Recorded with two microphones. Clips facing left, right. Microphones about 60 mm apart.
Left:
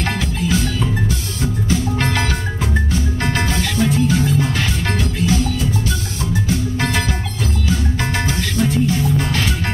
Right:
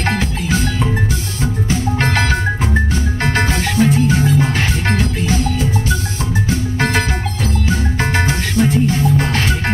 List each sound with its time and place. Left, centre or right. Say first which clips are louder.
1.4 s music: right 1 dB; right
3.3 s music: right 5 dB; right
8.0 s music: right 3 dB; right